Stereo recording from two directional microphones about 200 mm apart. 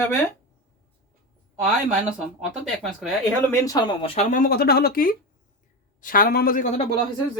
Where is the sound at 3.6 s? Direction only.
20° left (ahead or behind); by 6.9 s 40° left (ahead or behind).